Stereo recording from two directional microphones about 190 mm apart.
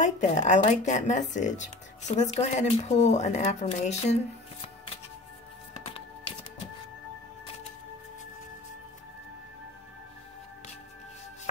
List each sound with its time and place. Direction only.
0.0 s speech: 40° left (ahead or behind)
5.9 s music: 30° left (ahead or behind)